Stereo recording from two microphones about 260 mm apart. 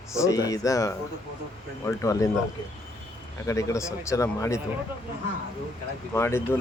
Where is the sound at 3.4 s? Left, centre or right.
Centre.